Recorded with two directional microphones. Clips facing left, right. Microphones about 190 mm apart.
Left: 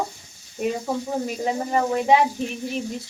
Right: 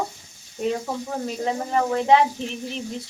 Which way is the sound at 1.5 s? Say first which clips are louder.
Even; 10° left (ahead or behind).